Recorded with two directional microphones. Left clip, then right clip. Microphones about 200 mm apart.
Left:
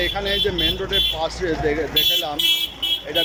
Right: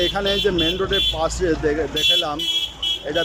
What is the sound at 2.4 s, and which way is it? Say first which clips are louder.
Vehicle: left 3 dB; 55° left (ahead or behind).